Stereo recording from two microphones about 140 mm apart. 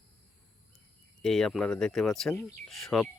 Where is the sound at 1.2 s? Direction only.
5° left (ahead or behind).